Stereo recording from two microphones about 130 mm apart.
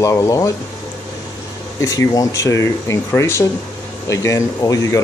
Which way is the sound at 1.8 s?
25° left (ahead or behind).